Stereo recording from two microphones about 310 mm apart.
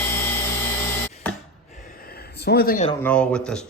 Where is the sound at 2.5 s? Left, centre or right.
Left.